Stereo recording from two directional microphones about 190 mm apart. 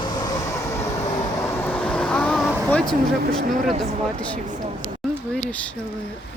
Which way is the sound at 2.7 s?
Centre (ahead or behind).